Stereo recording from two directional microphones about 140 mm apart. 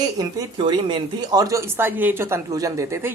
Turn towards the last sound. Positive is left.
turn(degrees=-20)  # may be behind; listen again after turning